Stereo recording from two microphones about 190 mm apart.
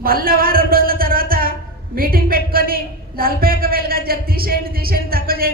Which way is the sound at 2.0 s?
50° right (ahead or behind).